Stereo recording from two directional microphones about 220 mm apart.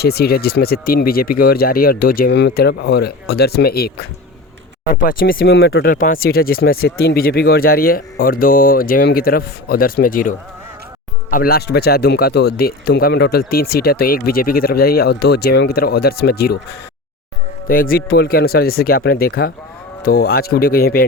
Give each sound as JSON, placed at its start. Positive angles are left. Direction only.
{"t": 0.0, "sound": "a man's voice", "side_deg": 45}
{"t": 17.7, "sound": "a man's voice", "side_deg": 40}